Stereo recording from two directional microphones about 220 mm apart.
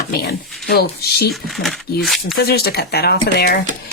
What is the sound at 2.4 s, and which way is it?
A woman's voice, 45° left (ahead or behind).